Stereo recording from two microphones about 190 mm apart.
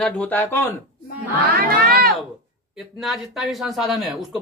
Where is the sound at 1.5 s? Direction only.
50° right (ahead or behind).